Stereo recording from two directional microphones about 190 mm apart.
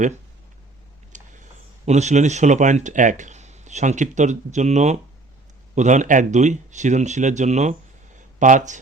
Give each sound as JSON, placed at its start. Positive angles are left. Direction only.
{"t": 1.1, "sound": "speech", "side_deg": -40}